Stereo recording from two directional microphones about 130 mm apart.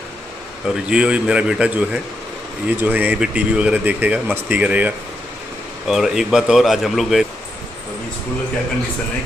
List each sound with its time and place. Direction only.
0.9 s speech: 5° right (ahead or behind)
5.9 s speech: 5° right (ahead or behind)